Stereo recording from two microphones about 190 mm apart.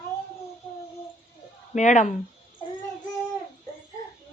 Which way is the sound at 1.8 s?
40° left (ahead or behind).